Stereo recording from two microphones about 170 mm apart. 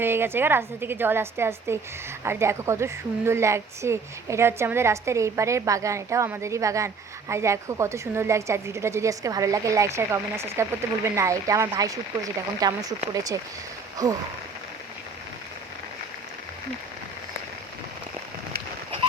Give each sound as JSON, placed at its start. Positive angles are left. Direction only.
{"t": 0.0, "sound": "a woman's voice", "side_deg": -15}